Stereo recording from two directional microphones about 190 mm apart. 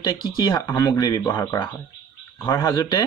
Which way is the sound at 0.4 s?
20° left (ahead or behind).